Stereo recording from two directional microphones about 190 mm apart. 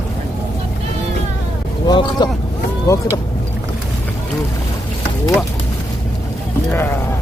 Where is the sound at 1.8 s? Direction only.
25° left (ahead or behind).